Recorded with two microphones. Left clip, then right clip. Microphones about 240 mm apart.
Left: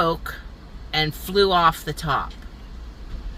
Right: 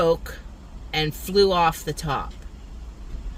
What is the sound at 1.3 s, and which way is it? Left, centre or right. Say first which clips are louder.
Speech: left 1 dB; centre.